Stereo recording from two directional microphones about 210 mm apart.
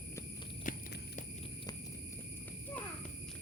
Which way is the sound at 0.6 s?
40° left (ahead or behind).